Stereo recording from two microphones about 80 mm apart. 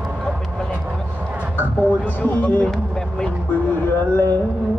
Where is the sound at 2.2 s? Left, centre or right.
Left.